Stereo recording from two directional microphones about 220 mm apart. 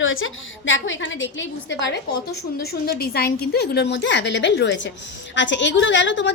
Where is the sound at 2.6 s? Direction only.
45° left (ahead or behind).